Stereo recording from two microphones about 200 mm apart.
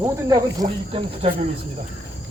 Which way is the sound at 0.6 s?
30° right (ahead or behind).